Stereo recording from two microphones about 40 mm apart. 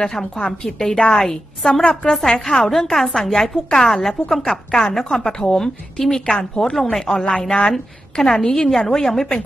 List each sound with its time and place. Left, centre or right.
0.0 s a woman's voice: centre
8.6 s a woman's voice: centre